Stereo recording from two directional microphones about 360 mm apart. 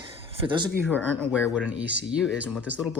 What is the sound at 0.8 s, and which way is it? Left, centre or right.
Speech, centre.